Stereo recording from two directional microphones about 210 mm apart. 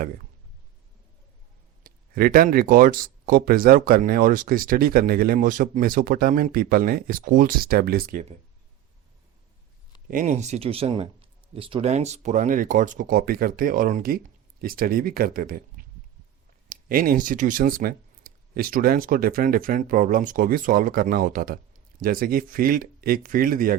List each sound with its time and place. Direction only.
1.8 s speech: 45° right (ahead or behind)
10.1 s speech: 40° right (ahead or behind)